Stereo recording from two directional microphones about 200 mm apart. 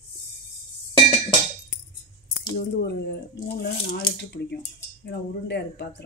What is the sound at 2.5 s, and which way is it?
Speech, 60° left (ahead or behind).